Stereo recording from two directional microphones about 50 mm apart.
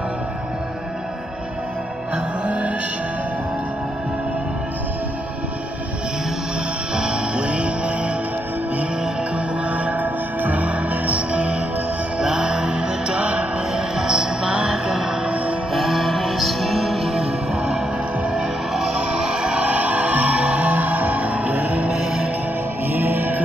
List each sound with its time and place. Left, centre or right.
2.4 s music: right
7.0 s music: centre
9.7 s music: right
13.7 s music: centre
15.2 s music: right
15.7 s music: centre
17.2 s music: centre
19.5 s music: right
21.9 s music: centre
22.9 s music: right